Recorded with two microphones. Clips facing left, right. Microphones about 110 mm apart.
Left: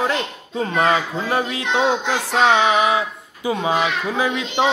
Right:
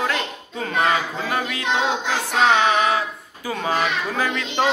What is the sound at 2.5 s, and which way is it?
Speech, 20° left (ahead or behind).